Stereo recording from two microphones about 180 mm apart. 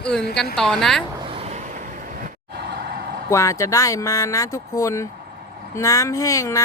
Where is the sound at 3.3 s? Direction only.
15° left (ahead or behind).